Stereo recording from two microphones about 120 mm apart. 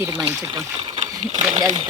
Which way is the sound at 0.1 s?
30° right (ahead or behind).